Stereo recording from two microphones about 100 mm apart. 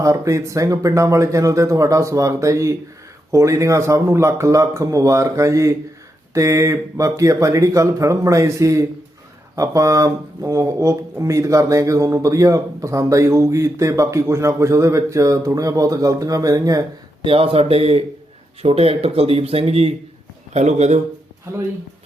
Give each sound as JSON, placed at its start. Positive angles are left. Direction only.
{"t": 0.0, "sound": "speech", "side_deg": -30}
{"t": 17.2, "sound": "speech", "side_deg": -70}
{"t": 21.5, "sound": "speech", "side_deg": -25}